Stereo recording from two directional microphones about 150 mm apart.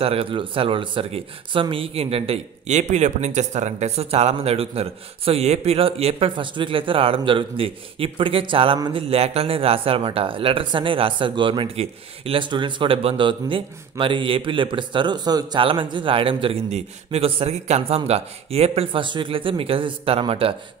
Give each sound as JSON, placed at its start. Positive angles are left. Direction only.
{"t": 0.0, "sound": "speech", "side_deg": -40}